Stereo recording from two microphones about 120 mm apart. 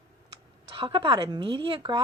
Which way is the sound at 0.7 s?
40° right (ahead or behind).